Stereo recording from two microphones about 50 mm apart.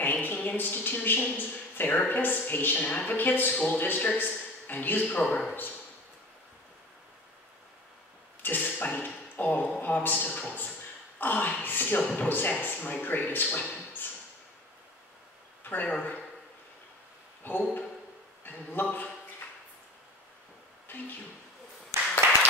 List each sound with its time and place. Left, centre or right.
0.0 s a woman's voice: left
3.2 s speech: left
4.2 s a sound: left
5.0 s speech: left
8.4 s arrow: left
8.9 s a sound: left
11.1 s speech: left
12.0 s speech: left
12.3 s speech: left
15.6 s a sound: left
17.4 s speech: left
21.9 s a sound: right